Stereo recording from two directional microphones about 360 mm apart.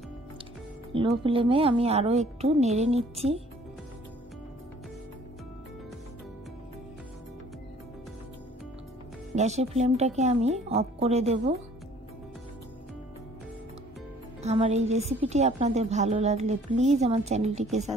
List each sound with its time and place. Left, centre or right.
0.9 s a woman's voice: centre
9.3 s a woman's voice: centre
14.4 s a woman's voice: centre